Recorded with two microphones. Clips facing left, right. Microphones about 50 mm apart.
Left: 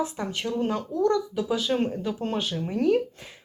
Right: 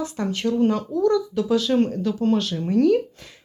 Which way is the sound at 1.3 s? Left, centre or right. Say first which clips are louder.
Right 5 dB; centre.